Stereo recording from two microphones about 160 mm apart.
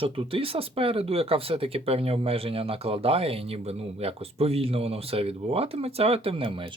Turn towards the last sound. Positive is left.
turn(degrees=-35)  # may be behind; listen again after turning